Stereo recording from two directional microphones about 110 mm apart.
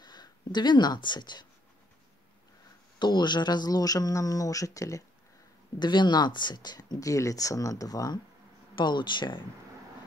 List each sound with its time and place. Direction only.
0.0 s speech: 40° left (ahead or behind)
3.0 s speech: 40° left (ahead or behind)
5.8 s speech: 40° left (ahead or behind)
8.7 s speech: 45° left (ahead or behind)